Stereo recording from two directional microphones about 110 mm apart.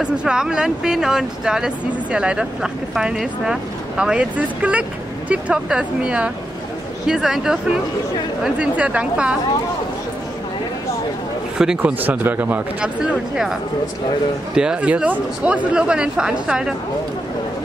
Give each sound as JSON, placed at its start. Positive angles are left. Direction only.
{"t": 0.0, "sound": "speech", "side_deg": -10}
{"t": 8.5, "sound": "speech", "side_deg": -10}
{"t": 11.5, "sound": "speech", "side_deg": -5}
{"t": 13.0, "sound": "speech", "side_deg": -5}